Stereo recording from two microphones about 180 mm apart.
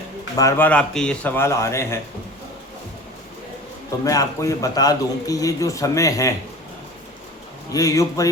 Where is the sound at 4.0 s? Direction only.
20° left (ahead or behind).